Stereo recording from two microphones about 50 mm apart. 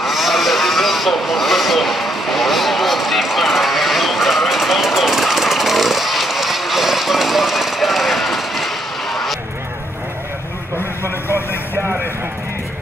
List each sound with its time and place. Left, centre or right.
0.0 s vehicle: centre
11.2 s vehicle: left